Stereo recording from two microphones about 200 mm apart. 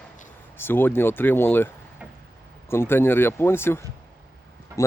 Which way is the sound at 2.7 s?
10° left (ahead or behind).